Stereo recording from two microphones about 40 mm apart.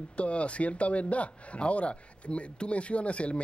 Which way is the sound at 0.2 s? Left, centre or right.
Left.